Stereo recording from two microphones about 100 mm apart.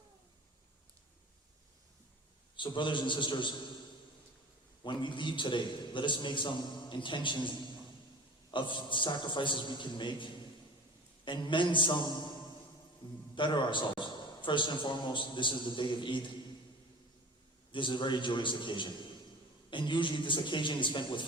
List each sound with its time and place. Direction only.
2.6 s a man's voice: 55° left (ahead or behind)
4.8 s a man's voice: 55° left (ahead or behind)
13.3 s a man's voice: 50° left (ahead or behind)
17.7 s a man's voice: 55° left (ahead or behind)